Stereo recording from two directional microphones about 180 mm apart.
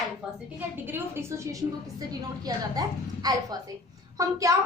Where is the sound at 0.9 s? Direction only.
15° right (ahead or behind).